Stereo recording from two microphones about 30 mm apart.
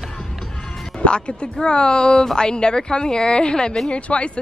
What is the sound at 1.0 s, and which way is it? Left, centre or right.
A woman's voice, left.